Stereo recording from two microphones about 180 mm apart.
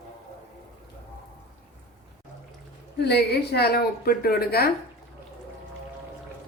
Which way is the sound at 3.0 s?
65° left (ahead or behind).